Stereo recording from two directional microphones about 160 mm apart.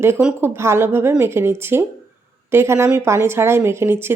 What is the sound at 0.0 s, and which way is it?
A woman's voice, 10° right (ahead or behind).